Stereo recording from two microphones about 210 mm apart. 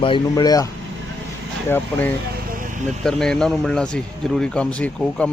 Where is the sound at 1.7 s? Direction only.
10° left (ahead or behind).